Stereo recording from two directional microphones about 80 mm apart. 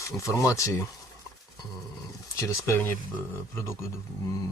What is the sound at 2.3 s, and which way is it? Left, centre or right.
Speech, left.